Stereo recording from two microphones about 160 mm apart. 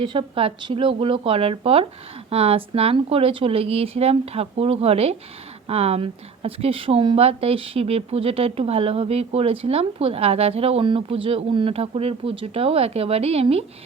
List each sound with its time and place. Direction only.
0.0 s speech: 30° right (ahead or behind)